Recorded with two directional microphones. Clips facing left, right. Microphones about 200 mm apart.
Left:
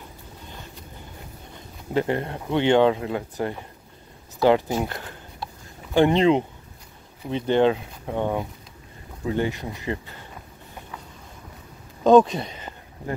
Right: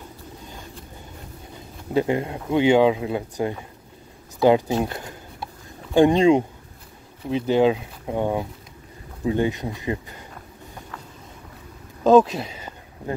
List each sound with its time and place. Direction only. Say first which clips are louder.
2.0 s speech: right 2 dB; 15° right (ahead or behind)
12.0 s speech: even; 5° right (ahead or behind)